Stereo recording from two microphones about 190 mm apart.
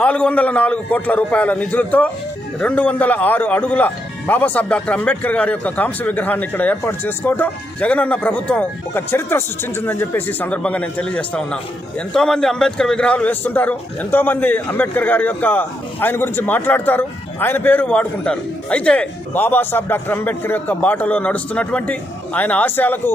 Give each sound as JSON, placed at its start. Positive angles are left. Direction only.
{"t": 0.0, "sound": "a man's voice", "side_deg": 5}